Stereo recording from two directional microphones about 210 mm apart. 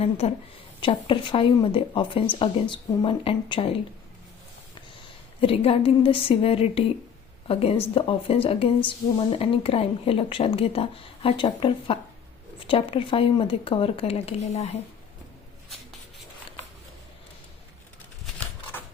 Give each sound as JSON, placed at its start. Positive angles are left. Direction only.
{"t": 0.2, "sound": "speech", "side_deg": 30}
{"t": 5.4, "sound": "a woman's voice", "side_deg": 25}